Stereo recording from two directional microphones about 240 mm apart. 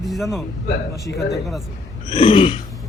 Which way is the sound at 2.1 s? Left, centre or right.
Left.